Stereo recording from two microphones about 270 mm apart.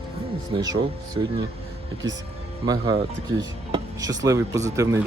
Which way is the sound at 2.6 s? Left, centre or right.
Centre.